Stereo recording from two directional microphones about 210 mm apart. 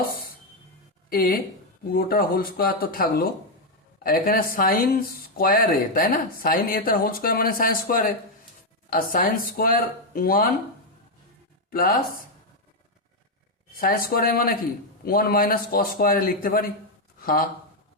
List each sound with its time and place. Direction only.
1.1 s a man's voice: 45° left (ahead or behind)
11.7 s a man's voice: 40° left (ahead or behind)
13.7 s a man's voice: 45° left (ahead or behind)